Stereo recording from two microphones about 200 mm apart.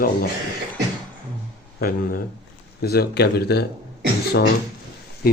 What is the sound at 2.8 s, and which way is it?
Speech, 50° left (ahead or behind).